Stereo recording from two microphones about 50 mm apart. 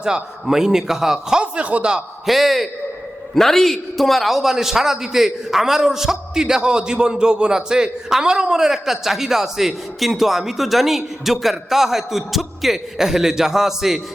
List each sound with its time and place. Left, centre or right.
0.0 s a man's voice: centre
1.4 s speech: right
2.2 s a man's voice: centre